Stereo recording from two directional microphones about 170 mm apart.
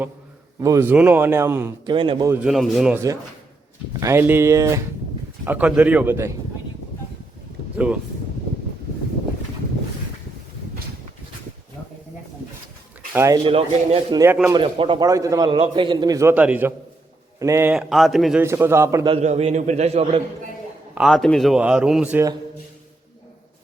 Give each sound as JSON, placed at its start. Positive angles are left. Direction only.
{"t": 0.6, "sound": "a man's voice", "side_deg": -15}
{"t": 1.9, "sound": "a man's voice", "side_deg": -30}
{"t": 2.4, "sound": "speech", "side_deg": 0}
{"t": 2.9, "sound": "a man's voice", "side_deg": -20}
{"t": 13.1, "sound": "a man's voice", "side_deg": -20}
{"t": 13.4, "sound": "a man's voice", "side_deg": -35}
{"t": 15.4, "sound": "a man's voice", "side_deg": -35}
{"t": 17.7, "sound": "speech", "side_deg": 0}
{"t": 18.4, "sound": "a man's voice", "side_deg": -15}
{"t": 19.0, "sound": "a man's voice", "side_deg": -35}
{"t": 20.9, "sound": "speech", "side_deg": 0}